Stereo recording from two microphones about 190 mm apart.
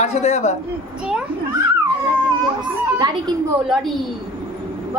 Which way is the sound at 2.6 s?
20° right (ahead or behind).